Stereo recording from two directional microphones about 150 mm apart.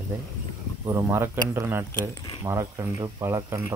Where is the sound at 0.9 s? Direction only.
20° right (ahead or behind).